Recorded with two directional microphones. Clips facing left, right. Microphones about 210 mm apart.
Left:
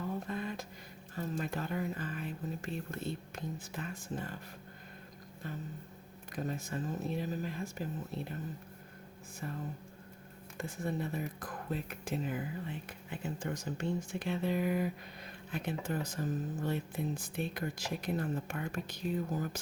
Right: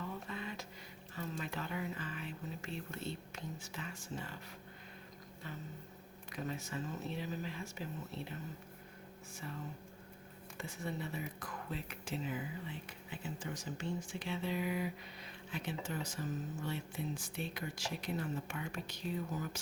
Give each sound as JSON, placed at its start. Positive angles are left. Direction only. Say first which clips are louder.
{"t": 0.1, "sound": "music", "louder": "left 6 dB", "side_deg": 45}
{"t": 1.1, "sound": "speech", "louder": "left 5 dB", "side_deg": 45}
{"t": 6.3, "sound": "speech", "louder": "left 4 dB", "side_deg": 45}
{"t": 10.6, "sound": "speech", "louder": "left 5 dB", "side_deg": 50}